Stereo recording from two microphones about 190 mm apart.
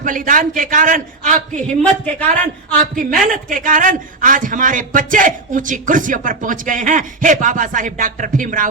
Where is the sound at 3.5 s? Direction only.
45° right (ahead or behind).